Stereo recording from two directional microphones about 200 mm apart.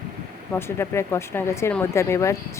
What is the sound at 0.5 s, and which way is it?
Speech, 10° left (ahead or behind).